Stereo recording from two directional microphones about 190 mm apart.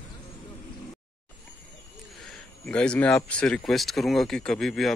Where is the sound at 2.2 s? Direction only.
5° left (ahead or behind).